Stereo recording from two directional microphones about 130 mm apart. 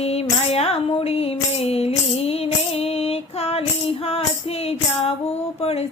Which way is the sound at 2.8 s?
50° left (ahead or behind).